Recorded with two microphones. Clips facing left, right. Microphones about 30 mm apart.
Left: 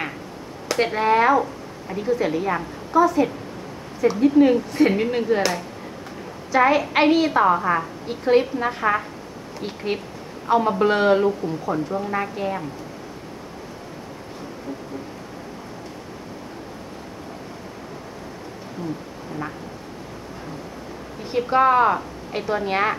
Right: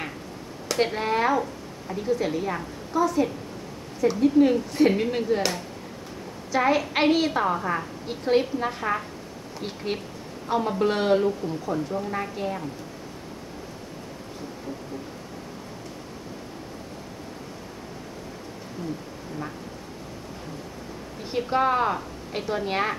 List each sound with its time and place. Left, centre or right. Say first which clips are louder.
0.7 s a woman's voice: left 5 dB; centre
6.5 s speech: left 5 dB; centre
9.6 s speech: left 4 dB; centre
10.5 s a woman's voice: left 5 dB; left
21.3 s speech: left 6 dB; centre